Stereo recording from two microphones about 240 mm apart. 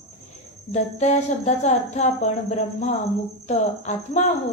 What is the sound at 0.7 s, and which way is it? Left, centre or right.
Speech, left.